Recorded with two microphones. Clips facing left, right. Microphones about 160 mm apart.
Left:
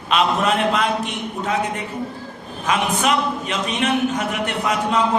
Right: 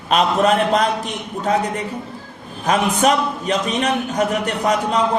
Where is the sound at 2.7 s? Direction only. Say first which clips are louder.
Right 3 dB; 40° right (ahead or behind).